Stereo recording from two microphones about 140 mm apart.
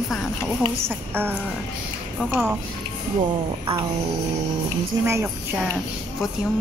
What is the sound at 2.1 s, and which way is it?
Speech, 5° left (ahead or behind).